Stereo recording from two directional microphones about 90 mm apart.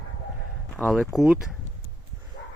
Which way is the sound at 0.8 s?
20° left (ahead or behind).